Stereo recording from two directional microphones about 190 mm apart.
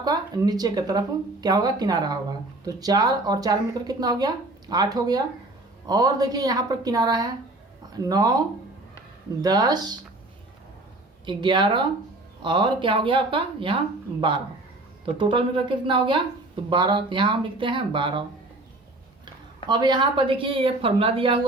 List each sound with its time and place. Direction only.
0.0 s a woman's voice: 20° right (ahead or behind)
11.3 s a woman's voice: 25° right (ahead or behind)
19.6 s a woman's voice: 25° right (ahead or behind)